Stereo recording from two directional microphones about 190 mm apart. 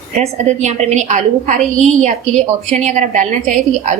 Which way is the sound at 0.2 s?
35° right (ahead or behind).